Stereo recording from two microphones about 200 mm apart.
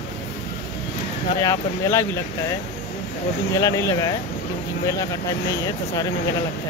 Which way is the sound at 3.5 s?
15° left (ahead or behind).